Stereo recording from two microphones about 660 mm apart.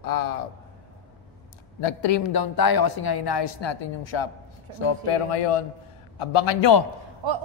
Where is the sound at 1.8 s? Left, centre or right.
Left.